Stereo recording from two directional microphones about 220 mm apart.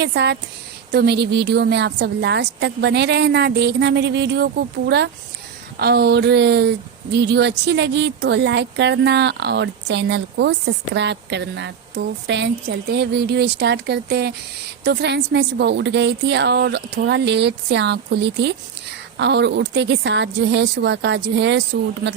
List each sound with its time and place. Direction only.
0.0 s speech: 50° right (ahead or behind)